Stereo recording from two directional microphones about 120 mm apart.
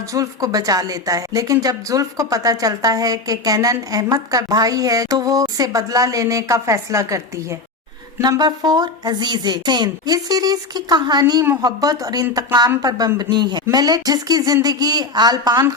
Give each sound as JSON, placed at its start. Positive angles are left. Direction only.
{"t": 0.1, "sound": "a woman's voice", "side_deg": -30}